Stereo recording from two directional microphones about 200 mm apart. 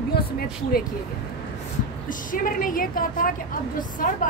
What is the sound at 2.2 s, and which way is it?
A woman's voice, 45° left (ahead or behind).